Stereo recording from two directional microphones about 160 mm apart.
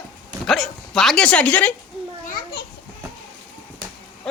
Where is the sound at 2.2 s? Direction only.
70° left (ahead or behind).